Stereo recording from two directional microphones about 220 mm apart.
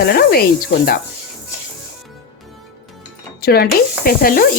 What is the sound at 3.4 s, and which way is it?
Speech, 45° left (ahead or behind).